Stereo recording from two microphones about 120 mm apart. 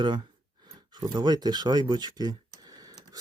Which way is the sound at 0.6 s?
35° right (ahead or behind).